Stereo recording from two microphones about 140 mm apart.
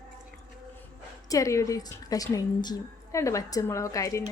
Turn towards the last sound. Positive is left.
turn(degrees=25)  # may be behind; listen again after turning